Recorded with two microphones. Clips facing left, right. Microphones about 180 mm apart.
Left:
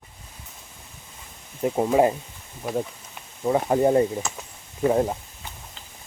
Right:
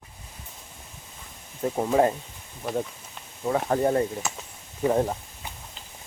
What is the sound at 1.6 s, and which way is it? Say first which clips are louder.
Speech: left 2 dB; 15° left (ahead or behind).